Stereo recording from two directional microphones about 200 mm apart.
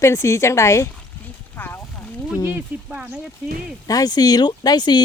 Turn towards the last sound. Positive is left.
turn(degrees=20)  # may be behind; listen again after turning